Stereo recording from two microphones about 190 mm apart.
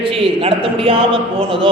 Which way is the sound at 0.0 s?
30° right (ahead or behind).